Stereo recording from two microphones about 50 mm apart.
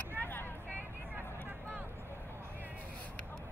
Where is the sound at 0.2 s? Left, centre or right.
Left.